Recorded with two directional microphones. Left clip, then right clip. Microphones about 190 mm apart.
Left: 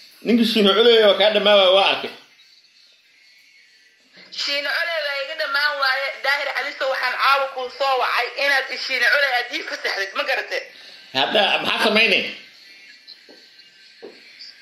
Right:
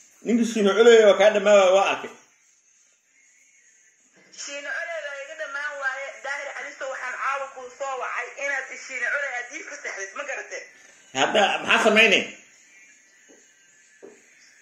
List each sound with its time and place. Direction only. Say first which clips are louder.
0.2 s a man's voice: left 5 dB; centre (ahead or behind)
4.4 s a sound: left 9 dB; 15° left (ahead or behind)
6.5 s speech: left 10 dB; 20° left (ahead or behind)
11.1 s a man's voice: left 3 dB; centre (ahead or behind)